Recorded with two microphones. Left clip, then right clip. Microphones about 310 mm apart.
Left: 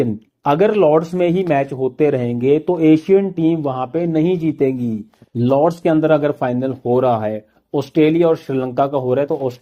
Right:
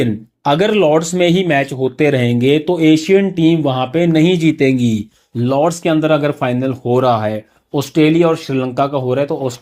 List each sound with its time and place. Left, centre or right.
0.0 s speech: right